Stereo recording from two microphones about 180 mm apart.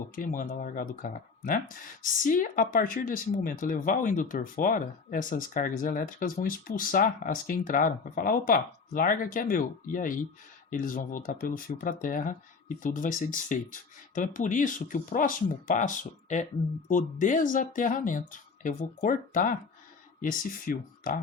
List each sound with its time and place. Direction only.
0.2 s speech: 50° left (ahead or behind)